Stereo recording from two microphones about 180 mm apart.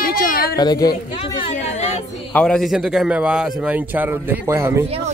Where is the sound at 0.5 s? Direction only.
20° left (ahead or behind).